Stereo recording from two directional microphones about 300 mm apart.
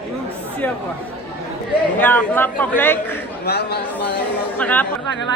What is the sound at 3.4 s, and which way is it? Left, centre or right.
Speech, left.